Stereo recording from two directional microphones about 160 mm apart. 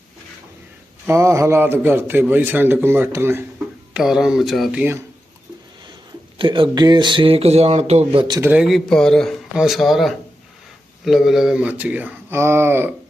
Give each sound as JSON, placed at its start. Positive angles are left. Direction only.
{"t": 1.0, "sound": "a man's voice", "side_deg": -15}
{"t": 3.9, "sound": "speech", "side_deg": -5}
{"t": 6.4, "sound": "speech", "side_deg": -30}
{"t": 8.4, "sound": "a man's voice", "side_deg": -10}